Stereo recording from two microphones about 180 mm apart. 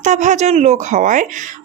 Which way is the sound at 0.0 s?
40° right (ahead or behind).